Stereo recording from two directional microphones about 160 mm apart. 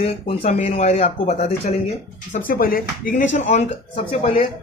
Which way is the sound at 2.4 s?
65° left (ahead or behind).